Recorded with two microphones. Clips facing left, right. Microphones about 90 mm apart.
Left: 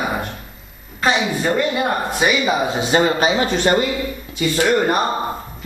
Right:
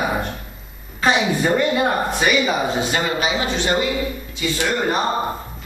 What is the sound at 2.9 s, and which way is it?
Speech, 35° left (ahead or behind).